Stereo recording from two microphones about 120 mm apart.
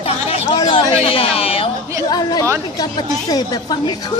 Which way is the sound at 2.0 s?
35° left (ahead or behind).